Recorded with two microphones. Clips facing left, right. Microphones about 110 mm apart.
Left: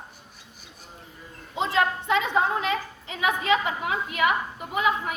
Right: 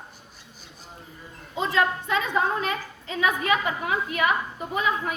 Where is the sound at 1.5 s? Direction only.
20° left (ahead or behind).